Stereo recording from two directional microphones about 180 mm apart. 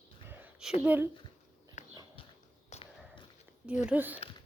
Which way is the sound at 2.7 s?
30° left (ahead or behind).